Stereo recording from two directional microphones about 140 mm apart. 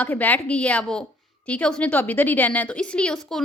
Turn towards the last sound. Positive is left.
turn(degrees=5)  # may be behind; listen again after turning